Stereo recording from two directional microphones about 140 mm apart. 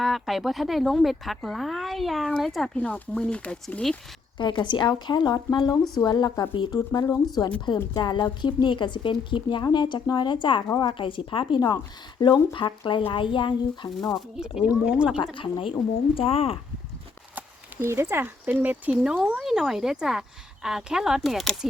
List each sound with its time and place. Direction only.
0.0 s speech: centre (ahead or behind)
4.4 s speech: 35° left (ahead or behind)
14.3 s speech: 5° right (ahead or behind)
15.1 s speech: 35° left (ahead or behind)
17.3 s speech: 20° right (ahead or behind); by 21.7 s centre (ahead or behind)